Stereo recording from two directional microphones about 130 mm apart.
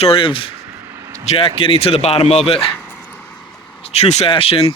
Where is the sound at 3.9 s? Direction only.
55° left (ahead or behind).